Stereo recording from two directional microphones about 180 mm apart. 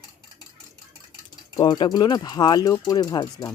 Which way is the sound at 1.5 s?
25° left (ahead or behind).